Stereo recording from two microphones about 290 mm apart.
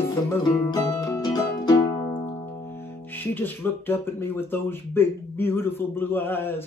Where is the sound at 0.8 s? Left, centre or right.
Centre.